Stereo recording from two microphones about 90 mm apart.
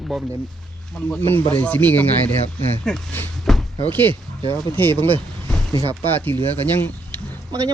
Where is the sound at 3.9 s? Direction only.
20° left (ahead or behind).